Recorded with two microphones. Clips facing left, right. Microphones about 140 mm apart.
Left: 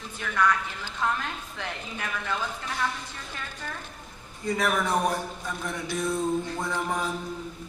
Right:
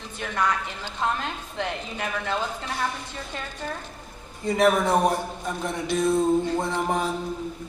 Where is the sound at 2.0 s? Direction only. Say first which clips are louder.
Right 3 dB; 25° right (ahead or behind).